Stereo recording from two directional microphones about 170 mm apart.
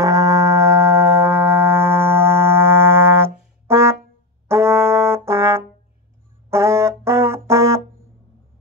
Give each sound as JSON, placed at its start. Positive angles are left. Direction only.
{"t": 0.0, "sound": "music", "side_deg": -20}
{"t": 4.5, "sound": "brass instrument", "side_deg": -15}